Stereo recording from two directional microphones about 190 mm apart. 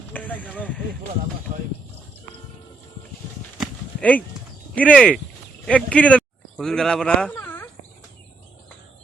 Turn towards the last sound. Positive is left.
turn(degrees=10)  # may be behind; listen again after turning